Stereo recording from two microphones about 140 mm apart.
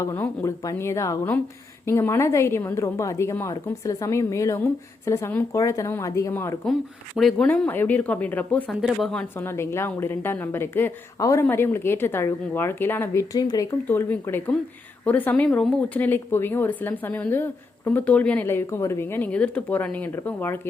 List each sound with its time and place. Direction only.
0.0 s a woman's voice: 20° left (ahead or behind)
7.2 s speech: centre (ahead or behind)
9.3 s speech: 15° left (ahead or behind)
13.8 s speech: 15° left (ahead or behind)